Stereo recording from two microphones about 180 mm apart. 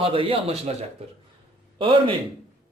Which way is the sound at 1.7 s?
25° right (ahead or behind).